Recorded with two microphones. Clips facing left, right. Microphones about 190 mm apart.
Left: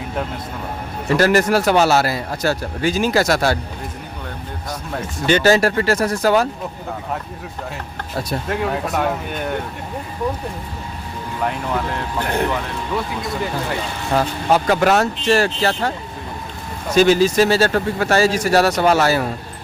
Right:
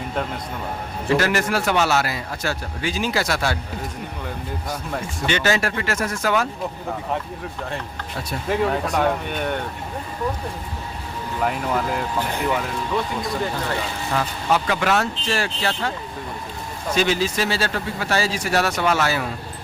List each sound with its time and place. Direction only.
1.1 s a man's voice: 40° left (ahead or behind)
5.2 s a man's voice: 40° left (ahead or behind)
8.4 s speech: centre (ahead or behind)
11.3 s speech: centre (ahead or behind)
14.1 s a man's voice: 40° left (ahead or behind)
16.9 s speech: 45° left (ahead or behind)